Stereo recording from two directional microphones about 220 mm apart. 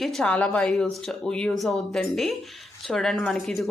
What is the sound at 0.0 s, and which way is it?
Speech, centre (ahead or behind).